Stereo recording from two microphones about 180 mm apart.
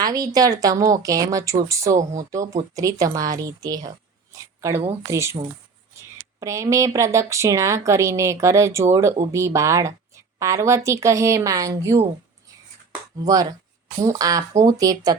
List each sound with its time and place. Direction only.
0.0 s speech: 20° right (ahead or behind)
13.2 s speech: 20° right (ahead or behind)